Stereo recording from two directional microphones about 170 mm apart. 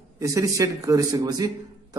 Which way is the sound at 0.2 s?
20° right (ahead or behind).